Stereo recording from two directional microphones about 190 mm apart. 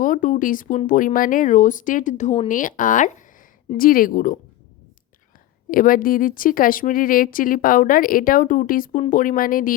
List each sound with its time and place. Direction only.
0.0 s speech: 45° left (ahead or behind)
5.7 s speech: 45° left (ahead or behind)